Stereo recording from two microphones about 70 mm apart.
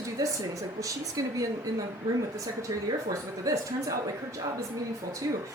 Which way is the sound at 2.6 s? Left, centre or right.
Right.